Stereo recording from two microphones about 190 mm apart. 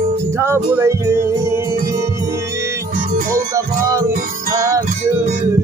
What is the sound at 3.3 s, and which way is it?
Music, 15° right (ahead or behind).